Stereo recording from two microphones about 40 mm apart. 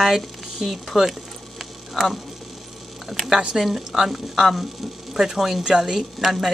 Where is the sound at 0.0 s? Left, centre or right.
Centre.